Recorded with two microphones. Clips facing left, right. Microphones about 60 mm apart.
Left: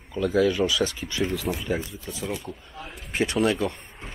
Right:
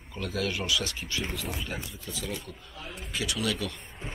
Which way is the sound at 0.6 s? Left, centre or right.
Left.